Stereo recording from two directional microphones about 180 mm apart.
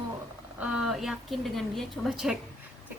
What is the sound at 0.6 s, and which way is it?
A woman's voice, 5° right (ahead or behind).